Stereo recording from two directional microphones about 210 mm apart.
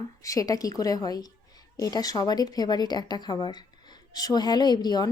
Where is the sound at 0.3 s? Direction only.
15° left (ahead or behind).